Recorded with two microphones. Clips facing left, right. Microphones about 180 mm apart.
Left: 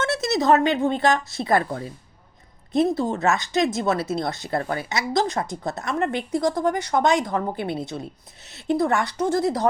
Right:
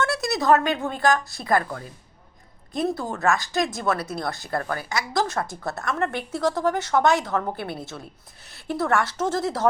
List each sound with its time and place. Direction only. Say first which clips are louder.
0.0 s a woman's voice: left 2 dB; 20° left (ahead or behind)